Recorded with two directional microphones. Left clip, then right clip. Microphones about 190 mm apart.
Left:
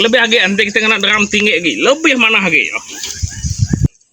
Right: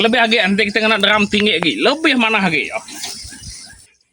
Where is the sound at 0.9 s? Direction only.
55° right (ahead or behind).